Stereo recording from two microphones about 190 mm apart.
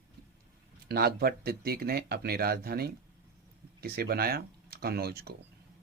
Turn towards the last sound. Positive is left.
turn(degrees=-55)  # may be behind; listen again after turning